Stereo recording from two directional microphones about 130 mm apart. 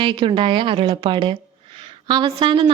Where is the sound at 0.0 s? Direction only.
40° right (ahead or behind).